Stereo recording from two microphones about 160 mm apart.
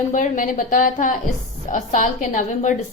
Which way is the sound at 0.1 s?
55° left (ahead or behind).